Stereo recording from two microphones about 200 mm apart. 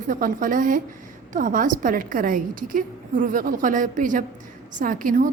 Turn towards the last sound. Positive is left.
turn(degrees=-45)  # may be behind; listen again after turning